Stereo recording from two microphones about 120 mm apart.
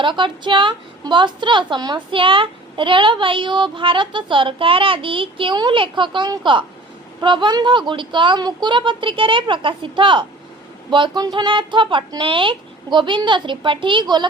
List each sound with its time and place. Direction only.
0.0 s a woman's voice: 40° right (ahead or behind)